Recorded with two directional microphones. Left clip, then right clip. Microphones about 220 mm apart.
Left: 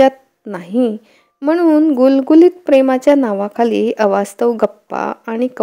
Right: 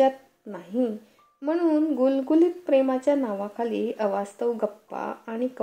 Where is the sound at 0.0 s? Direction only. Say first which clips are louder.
Left 10 dB; 50° left (ahead or behind).